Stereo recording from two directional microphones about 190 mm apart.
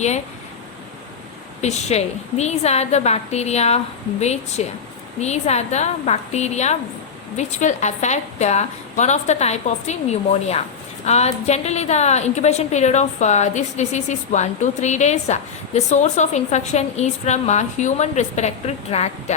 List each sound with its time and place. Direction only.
1.6 s a woman's voice: 35° left (ahead or behind)